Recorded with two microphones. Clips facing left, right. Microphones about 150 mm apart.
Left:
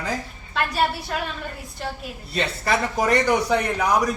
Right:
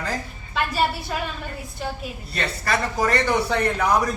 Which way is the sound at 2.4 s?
20° left (ahead or behind).